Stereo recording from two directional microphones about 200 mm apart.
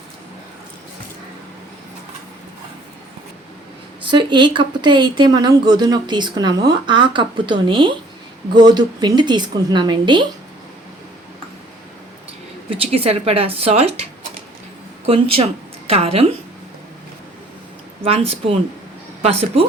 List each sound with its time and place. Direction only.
4.0 s speech: 25° right (ahead or behind)
12.7 s speech: 30° right (ahead or behind)
15.0 s speech: 30° right (ahead or behind)
18.0 s speech: 30° right (ahead or behind)